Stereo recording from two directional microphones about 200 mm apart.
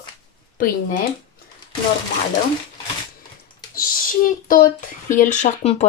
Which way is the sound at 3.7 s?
45° left (ahead or behind).